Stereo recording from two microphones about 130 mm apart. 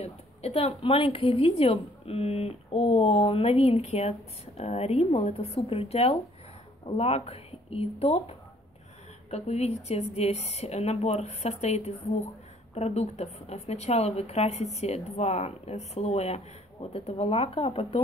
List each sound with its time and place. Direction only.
0.0 s a woman's voice: 55° left (ahead or behind)